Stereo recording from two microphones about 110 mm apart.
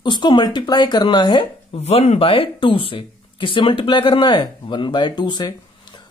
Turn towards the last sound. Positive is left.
turn(degrees=40)  # may be behind; listen again after turning